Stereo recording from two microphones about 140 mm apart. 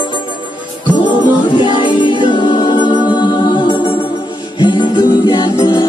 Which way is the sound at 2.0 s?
35° left (ahead or behind).